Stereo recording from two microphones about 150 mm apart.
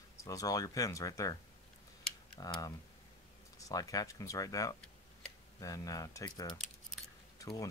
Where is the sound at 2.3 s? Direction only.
25° left (ahead or behind).